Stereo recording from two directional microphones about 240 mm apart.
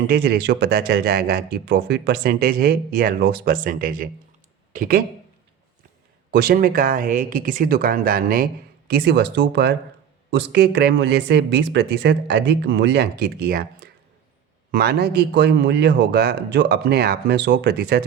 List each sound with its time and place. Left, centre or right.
0.1 s speech: right
6.3 s speech: right